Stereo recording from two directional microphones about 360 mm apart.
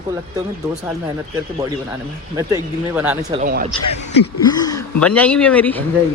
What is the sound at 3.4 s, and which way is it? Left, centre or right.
Speech, right.